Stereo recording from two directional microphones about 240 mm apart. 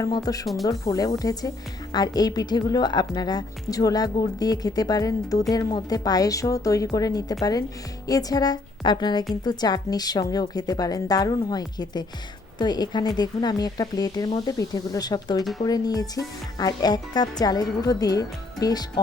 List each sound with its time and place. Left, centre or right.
0.0 s speech: centre